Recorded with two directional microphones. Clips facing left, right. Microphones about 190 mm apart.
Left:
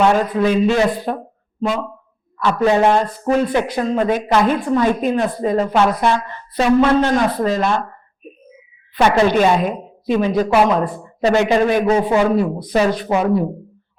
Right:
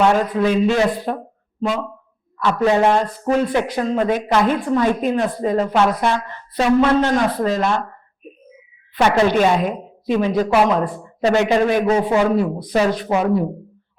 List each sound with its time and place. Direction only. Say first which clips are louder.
0.0 s a man's voice: left 1 dB; 20° left (ahead or behind)
9.0 s a man's voice: left 1 dB; 15° left (ahead or behind)